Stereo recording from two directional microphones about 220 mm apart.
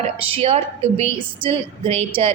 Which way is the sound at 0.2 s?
25° right (ahead or behind).